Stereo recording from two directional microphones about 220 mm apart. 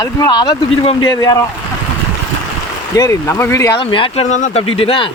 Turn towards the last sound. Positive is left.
turn(degrees=25)  # may be behind; listen again after turning